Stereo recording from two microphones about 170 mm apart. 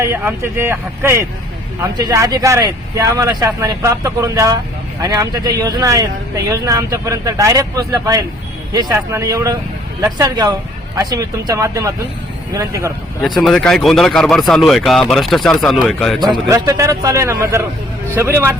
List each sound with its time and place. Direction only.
0.0 s speech: 15° right (ahead or behind)
13.2 s speech: centre (ahead or behind)
16.2 s speech: 20° right (ahead or behind)